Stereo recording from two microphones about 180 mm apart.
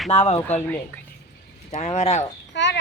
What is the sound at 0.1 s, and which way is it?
Speech, 35° left (ahead or behind).